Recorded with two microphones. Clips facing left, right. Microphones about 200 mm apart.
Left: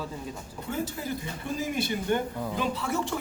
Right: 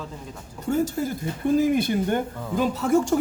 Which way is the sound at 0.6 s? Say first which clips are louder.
Right 9 dB; 45° right (ahead or behind).